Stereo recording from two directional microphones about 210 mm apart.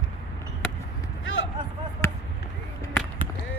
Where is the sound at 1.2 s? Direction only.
70° left (ahead or behind).